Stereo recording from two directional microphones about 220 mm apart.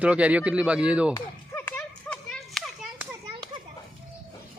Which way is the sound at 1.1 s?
10° left (ahead or behind).